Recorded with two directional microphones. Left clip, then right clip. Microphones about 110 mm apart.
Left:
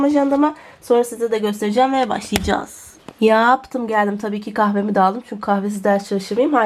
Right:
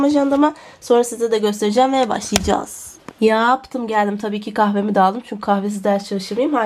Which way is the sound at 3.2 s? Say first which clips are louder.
Left 1 dB; 10° left (ahead or behind).